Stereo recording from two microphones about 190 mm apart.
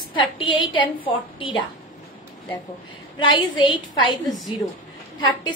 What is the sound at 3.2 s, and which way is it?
Speech, 25° left (ahead or behind).